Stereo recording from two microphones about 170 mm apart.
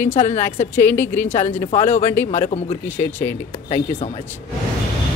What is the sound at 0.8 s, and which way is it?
Speech, 10° left (ahead or behind).